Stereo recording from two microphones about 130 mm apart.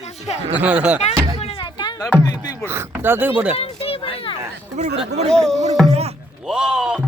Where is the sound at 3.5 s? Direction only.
50° left (ahead or behind).